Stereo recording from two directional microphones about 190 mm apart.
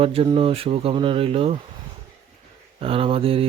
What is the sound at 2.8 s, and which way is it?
Speech, 30° right (ahead or behind).